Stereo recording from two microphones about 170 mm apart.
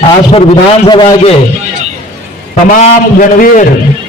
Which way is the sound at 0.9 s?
30° left (ahead or behind).